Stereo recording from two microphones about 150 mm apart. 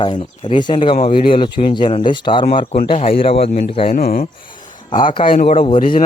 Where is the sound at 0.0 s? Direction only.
35° left (ahead or behind).